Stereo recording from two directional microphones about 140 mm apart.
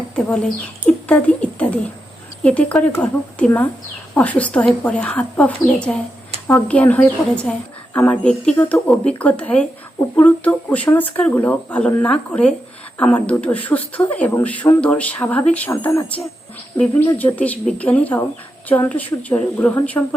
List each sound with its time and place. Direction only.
0.4 s speech: 5° left (ahead or behind)
20.0 s a woman's voice: 20° left (ahead or behind)